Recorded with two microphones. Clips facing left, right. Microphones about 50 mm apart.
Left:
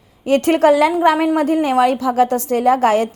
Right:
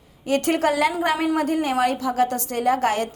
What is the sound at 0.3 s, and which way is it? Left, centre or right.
A woman's voice, left.